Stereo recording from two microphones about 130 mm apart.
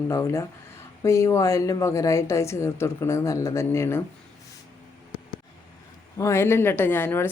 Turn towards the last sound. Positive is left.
turn(degrees=15)  # may be behind; listen again after turning